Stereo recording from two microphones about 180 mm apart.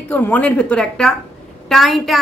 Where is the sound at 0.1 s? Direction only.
10° left (ahead or behind).